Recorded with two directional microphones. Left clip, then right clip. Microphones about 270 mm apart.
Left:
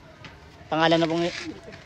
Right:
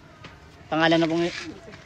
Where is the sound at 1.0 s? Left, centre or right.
Left.